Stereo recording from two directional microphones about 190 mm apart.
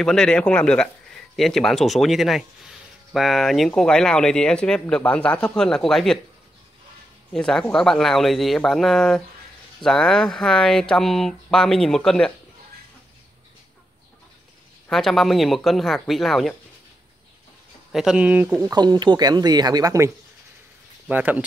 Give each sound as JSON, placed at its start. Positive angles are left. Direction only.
{"t": 0.0, "sound": "speech", "side_deg": 5}
{"t": 7.3, "sound": "speech", "side_deg": 5}
{"t": 14.9, "sound": "speech", "side_deg": 0}
{"t": 17.9, "sound": "speech", "side_deg": -5}
{"t": 18.6, "sound": "speech", "side_deg": -20}
{"t": 21.1, "sound": "speech", "side_deg": -10}